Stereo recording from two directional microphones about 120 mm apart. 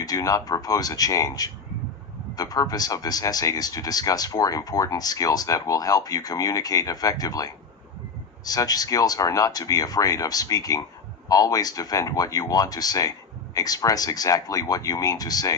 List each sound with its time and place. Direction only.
0.0 s speech: 30° left (ahead or behind)